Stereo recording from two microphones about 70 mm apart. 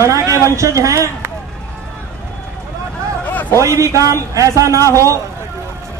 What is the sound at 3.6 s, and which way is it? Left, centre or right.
A man's voice, right.